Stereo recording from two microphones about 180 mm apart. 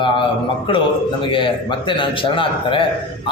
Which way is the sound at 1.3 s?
30° left (ahead or behind).